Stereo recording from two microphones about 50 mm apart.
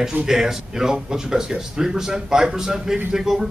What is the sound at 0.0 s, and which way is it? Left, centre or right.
Speech, right.